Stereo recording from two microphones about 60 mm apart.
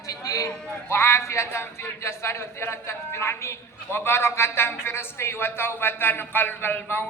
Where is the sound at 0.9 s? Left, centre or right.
Left.